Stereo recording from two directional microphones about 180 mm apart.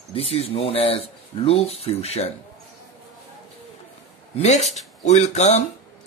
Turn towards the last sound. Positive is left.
turn(degrees=40)  # may be behind; listen again after turning